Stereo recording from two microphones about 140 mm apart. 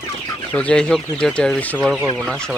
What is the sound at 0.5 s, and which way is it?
Speech, 10° left (ahead or behind).